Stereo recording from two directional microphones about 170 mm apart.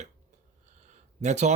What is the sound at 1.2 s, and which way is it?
Speech, 40° right (ahead or behind).